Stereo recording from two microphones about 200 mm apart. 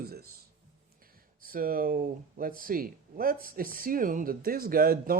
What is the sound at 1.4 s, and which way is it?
Speech, 45° right (ahead or behind).